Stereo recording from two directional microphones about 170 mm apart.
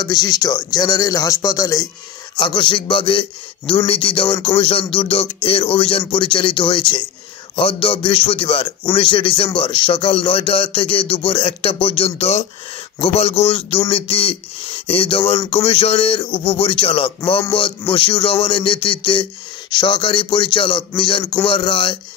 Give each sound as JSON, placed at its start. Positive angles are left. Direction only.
{"t": 0.0, "sound": "a man's voice", "side_deg": 25}